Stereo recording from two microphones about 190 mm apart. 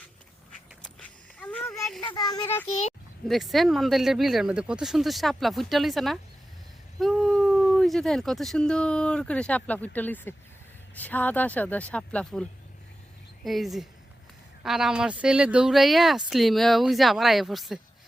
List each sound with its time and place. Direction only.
0.8 s a sound: 5° left (ahead or behind)
2.0 s speech: 20° left (ahead or behind)
3.2 s speech: centre (ahead or behind)